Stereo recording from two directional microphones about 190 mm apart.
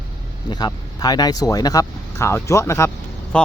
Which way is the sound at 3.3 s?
5° left (ahead or behind).